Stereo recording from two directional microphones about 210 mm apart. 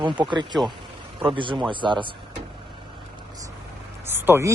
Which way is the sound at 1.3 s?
25° right (ahead or behind).